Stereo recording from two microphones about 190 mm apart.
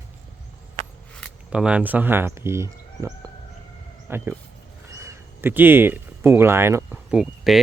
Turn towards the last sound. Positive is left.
turn(degrees=-5)  # may be behind; listen again after turning